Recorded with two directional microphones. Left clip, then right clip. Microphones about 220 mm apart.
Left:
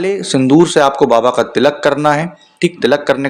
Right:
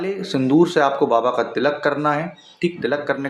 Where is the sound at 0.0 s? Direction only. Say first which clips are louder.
Left 8 dB; 40° left (ahead or behind).